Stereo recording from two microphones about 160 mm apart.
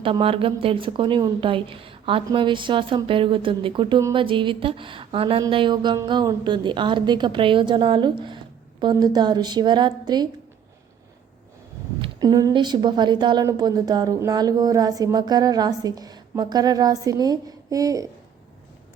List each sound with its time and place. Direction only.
0.0 s a woman's voice: 35° right (ahead or behind)
12.0 s a woman's voice: 25° right (ahead or behind)